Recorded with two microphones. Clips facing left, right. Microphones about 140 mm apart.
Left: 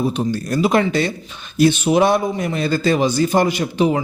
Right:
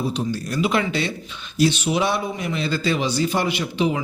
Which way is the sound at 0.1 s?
45° left (ahead or behind).